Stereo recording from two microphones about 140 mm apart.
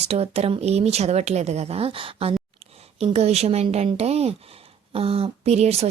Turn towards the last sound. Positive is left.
turn(degrees=-50)  # may be behind; listen again after turning